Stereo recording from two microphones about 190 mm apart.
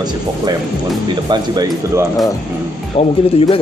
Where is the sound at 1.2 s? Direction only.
20° right (ahead or behind).